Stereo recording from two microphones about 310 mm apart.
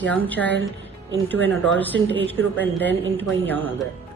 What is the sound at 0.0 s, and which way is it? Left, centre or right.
Speech, centre.